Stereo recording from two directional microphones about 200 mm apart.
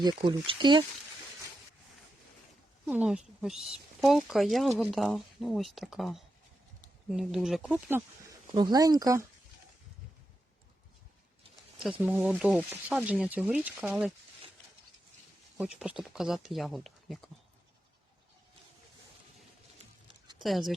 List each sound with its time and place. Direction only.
0.0 s speech: 20° right (ahead or behind)
2.8 s speech: 5° right (ahead or behind)
11.8 s speech: 5° right (ahead or behind)
15.5 s speech: 5° right (ahead or behind)
20.4 s speech: centre (ahead or behind)